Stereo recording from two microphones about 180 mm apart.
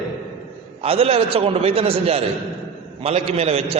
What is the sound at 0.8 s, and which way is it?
A man's voice, 35° right (ahead or behind).